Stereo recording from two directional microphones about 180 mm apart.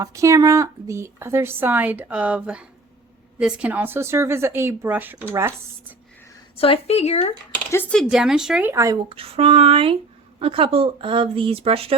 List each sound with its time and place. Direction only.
0.0 s speech: 15° right (ahead or behind)
6.6 s speech: 35° left (ahead or behind)
7.7 s speech: 10° left (ahead or behind)
8.0 s speech: 5° right (ahead or behind)
8.7 s speech: 15° right (ahead or behind)
9.0 s speech: 30° right (ahead or behind)